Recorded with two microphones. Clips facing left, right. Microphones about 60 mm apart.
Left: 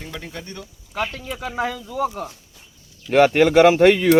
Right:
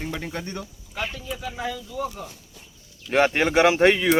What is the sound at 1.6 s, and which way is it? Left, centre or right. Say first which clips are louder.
Speech: left 8 dB; left.